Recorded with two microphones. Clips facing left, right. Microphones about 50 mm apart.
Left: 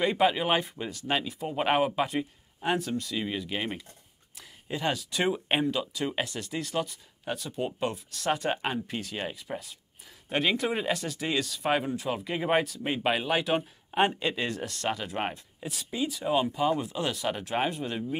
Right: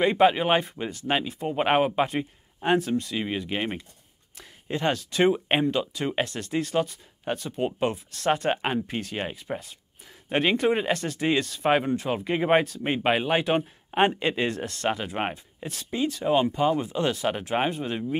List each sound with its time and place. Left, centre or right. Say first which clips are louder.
0.0 s speech: right 5 dB; right
0.5 s speech: right 4 dB; centre
0.7 s speech: right 3 dB; right
4.4 s speech: right 4 dB; centre
5.3 s speech: right 4 dB; right
15.6 s speech: right 3 dB; centre
16.2 s speech: right 4 dB; centre
17.2 s speech: right 3 dB; right